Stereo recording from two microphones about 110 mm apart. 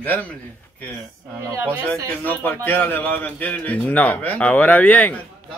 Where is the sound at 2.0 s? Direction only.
15° left (ahead or behind).